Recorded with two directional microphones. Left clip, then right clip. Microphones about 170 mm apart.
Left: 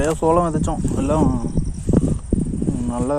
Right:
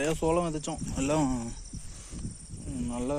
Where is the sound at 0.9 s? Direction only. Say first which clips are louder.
Left 8 dB; 40° right (ahead or behind).